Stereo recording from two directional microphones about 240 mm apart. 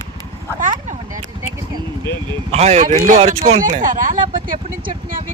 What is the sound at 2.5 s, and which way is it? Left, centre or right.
Speech, right.